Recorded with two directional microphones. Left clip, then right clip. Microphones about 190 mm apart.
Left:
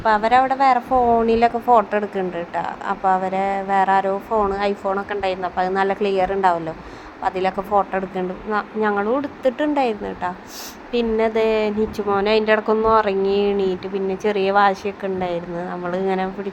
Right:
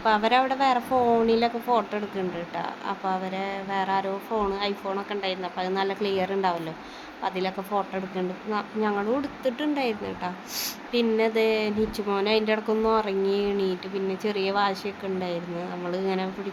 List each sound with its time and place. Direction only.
0.0 s a woman's voice: 15° left (ahead or behind)